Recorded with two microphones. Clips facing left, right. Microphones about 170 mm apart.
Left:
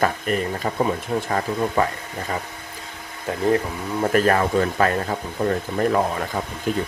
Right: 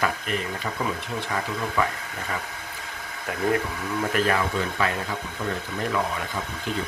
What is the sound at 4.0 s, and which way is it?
Speech, 45° left (ahead or behind).